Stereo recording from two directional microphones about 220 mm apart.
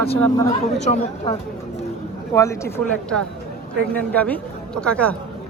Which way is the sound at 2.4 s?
10° left (ahead or behind).